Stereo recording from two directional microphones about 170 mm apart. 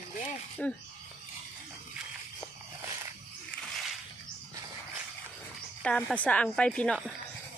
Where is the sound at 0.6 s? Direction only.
5° left (ahead or behind).